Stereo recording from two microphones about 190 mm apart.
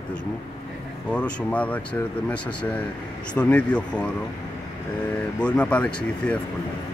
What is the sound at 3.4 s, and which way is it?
Speech, 5° left (ahead or behind).